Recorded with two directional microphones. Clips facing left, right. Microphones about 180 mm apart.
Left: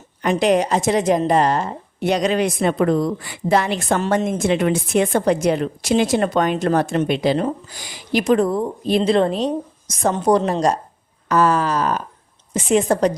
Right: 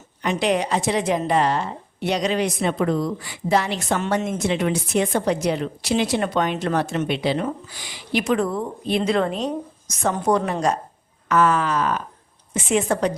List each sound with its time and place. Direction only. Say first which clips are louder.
0.2 s a woman's voice: left 5 dB; 45° left (ahead or behind)